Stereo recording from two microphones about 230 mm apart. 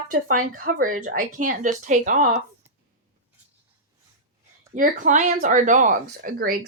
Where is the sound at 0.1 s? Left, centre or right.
Right.